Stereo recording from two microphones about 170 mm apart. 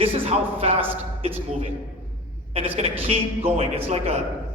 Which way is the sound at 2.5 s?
35° right (ahead or behind).